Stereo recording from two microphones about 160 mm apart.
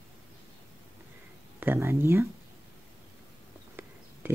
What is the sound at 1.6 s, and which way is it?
Speech, 15° right (ahead or behind).